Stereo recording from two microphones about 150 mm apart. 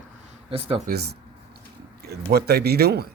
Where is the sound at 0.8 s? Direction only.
90° right.